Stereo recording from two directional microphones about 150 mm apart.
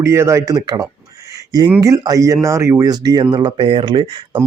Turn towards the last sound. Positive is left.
turn(degrees=-30)  # may be behind; listen again after turning